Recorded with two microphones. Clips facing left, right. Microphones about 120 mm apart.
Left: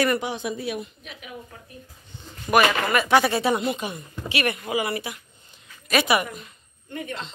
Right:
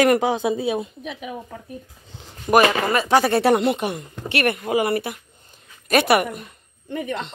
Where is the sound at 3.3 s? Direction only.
65° right (ahead or behind).